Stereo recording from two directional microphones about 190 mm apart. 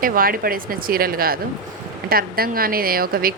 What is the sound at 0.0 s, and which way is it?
A woman's voice, 50° right (ahead or behind).